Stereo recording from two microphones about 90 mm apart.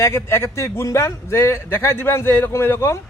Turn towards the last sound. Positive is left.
turn(degrees=30)  # may be behind; listen again after turning